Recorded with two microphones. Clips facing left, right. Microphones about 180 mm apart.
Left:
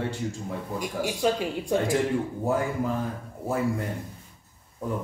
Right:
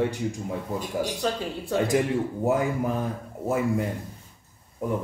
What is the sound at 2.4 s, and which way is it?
Speech, 20° right (ahead or behind).